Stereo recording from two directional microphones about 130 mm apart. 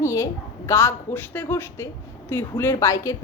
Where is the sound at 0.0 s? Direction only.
25° left (ahead or behind).